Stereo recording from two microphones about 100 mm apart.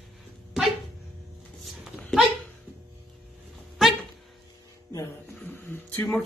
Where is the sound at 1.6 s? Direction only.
Centre (ahead or behind).